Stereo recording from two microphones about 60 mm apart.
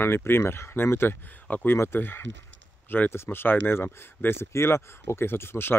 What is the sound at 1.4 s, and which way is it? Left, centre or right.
Speech, left.